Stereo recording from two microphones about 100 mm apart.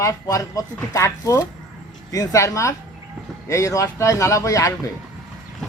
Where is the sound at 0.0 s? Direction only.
35° left (ahead or behind).